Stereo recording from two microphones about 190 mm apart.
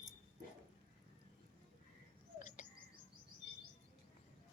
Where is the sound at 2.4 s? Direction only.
40° left (ahead or behind).